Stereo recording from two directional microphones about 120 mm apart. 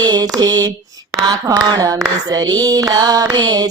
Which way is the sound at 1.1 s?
30° right (ahead or behind).